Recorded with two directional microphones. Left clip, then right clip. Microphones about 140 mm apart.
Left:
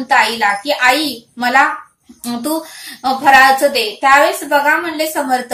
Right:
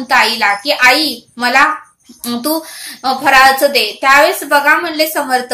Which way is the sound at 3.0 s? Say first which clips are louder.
Even; 25° right (ahead or behind).